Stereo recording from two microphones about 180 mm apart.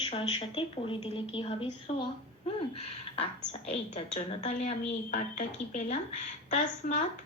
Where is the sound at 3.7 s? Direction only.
40° left (ahead or behind).